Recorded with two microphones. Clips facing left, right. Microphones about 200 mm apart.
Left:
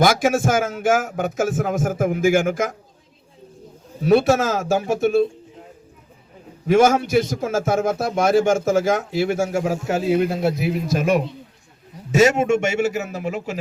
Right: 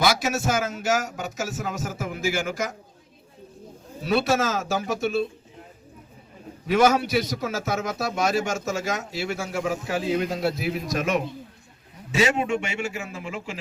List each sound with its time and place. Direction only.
0.0 s a man's voice: 50° left (ahead or behind)
4.0 s a man's voice: 50° left (ahead or behind)
6.7 s a man's voice: 50° left (ahead or behind)
10.1 s a man's voice: 10° left (ahead or behind)
10.4 s a man's voice: 25° left (ahead or behind)
12.1 s a man's voice: 45° left (ahead or behind)